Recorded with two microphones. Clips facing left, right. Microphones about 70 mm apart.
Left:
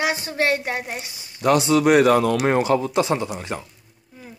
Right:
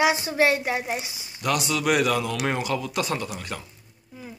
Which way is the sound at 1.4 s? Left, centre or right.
Left.